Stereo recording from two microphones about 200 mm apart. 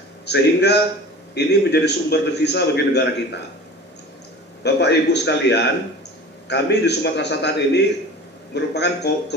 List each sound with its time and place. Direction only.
0.3 s a man's voice: 55° left (ahead or behind)
4.6 s a man's voice: 60° left (ahead or behind)